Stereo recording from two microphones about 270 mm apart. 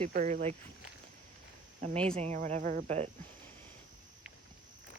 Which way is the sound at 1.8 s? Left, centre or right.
Right.